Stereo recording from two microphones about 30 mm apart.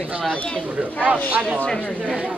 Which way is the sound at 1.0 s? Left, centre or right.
Right.